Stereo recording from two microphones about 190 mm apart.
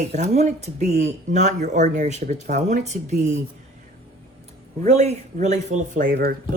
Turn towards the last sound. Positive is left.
turn(degrees=-50)  # may be behind; listen again after turning